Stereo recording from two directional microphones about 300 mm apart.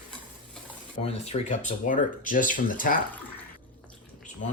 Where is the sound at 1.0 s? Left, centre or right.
Left.